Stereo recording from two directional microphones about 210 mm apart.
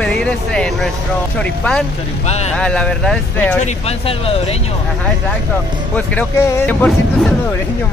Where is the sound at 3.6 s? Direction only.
30° left (ahead or behind).